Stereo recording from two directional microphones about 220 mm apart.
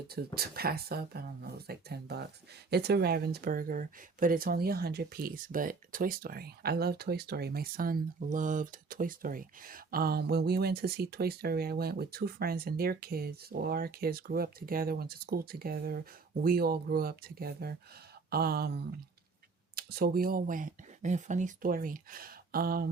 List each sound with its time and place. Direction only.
0.3 s speech: 45° right (ahead or behind)